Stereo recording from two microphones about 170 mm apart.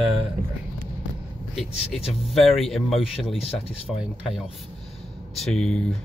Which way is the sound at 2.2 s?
Centre (ahead or behind).